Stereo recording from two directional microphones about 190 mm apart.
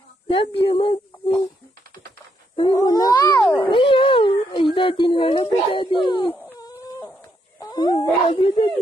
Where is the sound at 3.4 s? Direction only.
10° left (ahead or behind).